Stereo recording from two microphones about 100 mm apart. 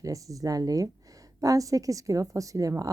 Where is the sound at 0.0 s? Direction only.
35° right (ahead or behind).